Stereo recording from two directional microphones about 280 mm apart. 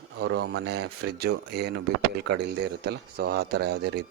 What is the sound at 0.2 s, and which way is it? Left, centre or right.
Speech, right.